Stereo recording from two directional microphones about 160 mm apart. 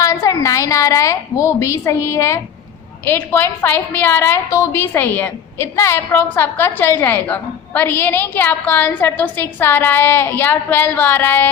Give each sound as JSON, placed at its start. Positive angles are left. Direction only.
{"t": 0.0, "sound": "a woman's voice", "side_deg": 20}